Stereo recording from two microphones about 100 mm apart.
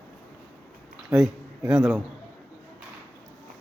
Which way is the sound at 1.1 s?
10° right (ahead or behind).